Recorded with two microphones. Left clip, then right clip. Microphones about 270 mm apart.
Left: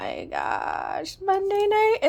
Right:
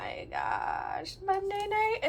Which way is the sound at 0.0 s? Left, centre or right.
Left.